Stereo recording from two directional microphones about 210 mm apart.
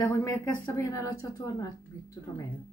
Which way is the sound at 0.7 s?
15° left (ahead or behind).